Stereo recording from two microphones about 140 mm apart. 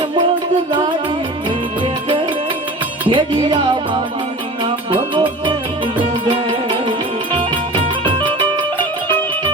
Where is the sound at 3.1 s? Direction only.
35° right (ahead or behind).